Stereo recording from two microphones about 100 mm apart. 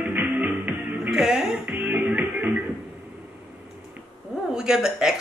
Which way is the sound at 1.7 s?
15° right (ahead or behind).